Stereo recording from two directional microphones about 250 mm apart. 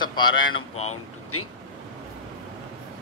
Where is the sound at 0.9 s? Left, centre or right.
Left.